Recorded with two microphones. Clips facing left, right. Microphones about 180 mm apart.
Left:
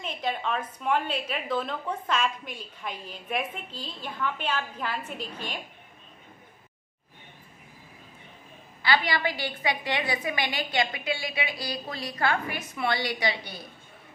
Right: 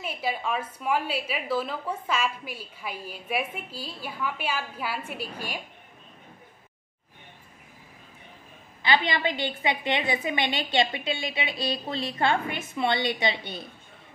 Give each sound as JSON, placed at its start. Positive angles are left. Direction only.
{"t": 0.0, "sound": "a woman's voice", "side_deg": -10}
{"t": 8.8, "sound": "a woman's voice", "side_deg": -20}